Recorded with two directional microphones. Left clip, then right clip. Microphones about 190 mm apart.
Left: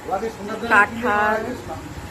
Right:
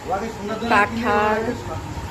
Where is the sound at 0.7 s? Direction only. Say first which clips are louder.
Left 1 dB; centre (ahead or behind).